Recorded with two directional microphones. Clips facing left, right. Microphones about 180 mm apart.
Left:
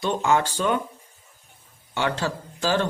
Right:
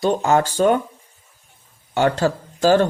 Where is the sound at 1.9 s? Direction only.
45° right (ahead or behind).